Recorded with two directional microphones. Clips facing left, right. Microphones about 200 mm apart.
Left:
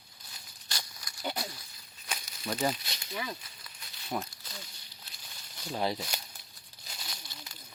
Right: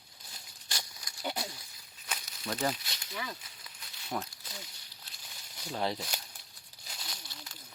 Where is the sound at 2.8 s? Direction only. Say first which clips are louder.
Left 3 dB; 20° left (ahead or behind).